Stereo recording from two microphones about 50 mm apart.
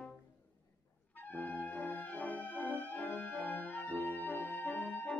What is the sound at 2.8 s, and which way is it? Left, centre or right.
Music, left.